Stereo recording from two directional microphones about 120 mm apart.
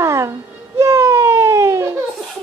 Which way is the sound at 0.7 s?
25° right (ahead or behind).